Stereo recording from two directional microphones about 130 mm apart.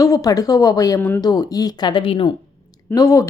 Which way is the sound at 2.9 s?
25° left (ahead or behind).